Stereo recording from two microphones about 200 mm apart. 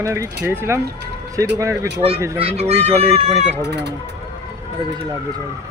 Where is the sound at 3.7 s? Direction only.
55° right (ahead or behind).